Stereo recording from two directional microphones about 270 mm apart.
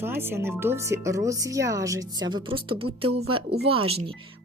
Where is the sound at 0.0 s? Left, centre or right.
Centre.